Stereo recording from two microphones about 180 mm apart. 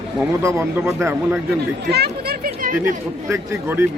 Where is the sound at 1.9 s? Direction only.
65° right (ahead or behind).